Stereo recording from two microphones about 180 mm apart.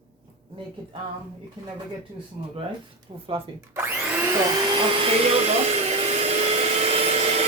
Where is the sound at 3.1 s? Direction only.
25° right (ahead or behind).